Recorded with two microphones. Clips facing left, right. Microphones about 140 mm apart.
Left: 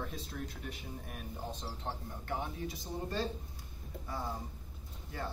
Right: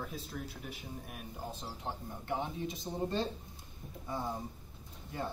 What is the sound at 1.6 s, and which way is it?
A man's voice, 15° right (ahead or behind).